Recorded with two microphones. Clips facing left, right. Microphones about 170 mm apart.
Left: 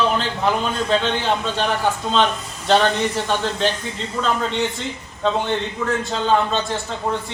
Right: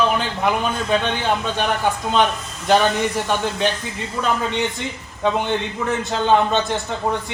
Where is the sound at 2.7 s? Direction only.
10° right (ahead or behind).